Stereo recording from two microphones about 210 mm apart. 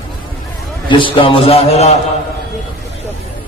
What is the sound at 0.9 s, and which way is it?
A man's voice, 25° left (ahead or behind).